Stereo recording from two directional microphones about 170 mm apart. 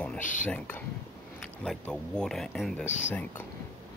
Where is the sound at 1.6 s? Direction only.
5° left (ahead or behind).